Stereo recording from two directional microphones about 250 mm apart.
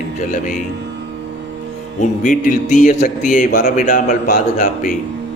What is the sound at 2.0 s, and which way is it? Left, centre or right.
A man's voice, left.